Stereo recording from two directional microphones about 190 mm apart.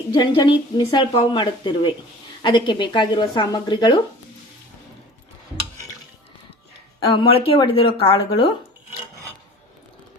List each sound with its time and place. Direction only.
0.1 s a woman's voice: 25° left (ahead or behind)
7.1 s a woman's voice: 30° left (ahead or behind)